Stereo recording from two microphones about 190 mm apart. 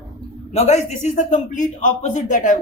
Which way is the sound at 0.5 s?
35° left (ahead or behind).